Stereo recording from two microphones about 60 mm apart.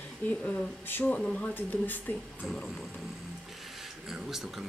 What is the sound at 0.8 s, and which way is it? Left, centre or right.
Speech, left.